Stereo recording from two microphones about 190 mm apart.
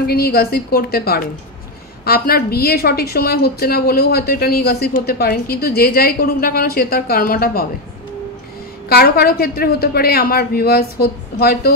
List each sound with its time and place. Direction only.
0.0 s a woman's voice: 55° left (ahead or behind)
8.8 s a woman's voice: 55° left (ahead or behind)